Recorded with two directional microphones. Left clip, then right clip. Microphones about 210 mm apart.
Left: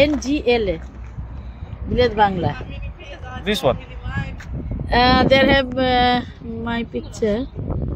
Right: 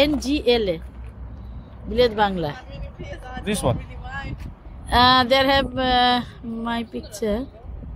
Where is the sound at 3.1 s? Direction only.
40° right (ahead or behind).